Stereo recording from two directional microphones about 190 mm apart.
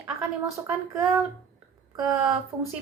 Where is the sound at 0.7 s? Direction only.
15° right (ahead or behind).